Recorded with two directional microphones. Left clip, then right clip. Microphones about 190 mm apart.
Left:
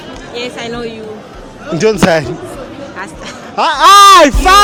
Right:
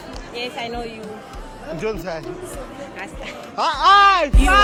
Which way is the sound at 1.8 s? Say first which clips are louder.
Left 17 dB; 55° left (ahead or behind).